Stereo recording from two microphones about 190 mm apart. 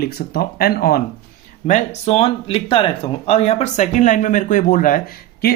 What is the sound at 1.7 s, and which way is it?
Speech, 35° left (ahead or behind).